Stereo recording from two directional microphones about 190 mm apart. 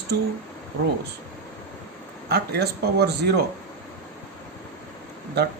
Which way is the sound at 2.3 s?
60° right (ahead or behind).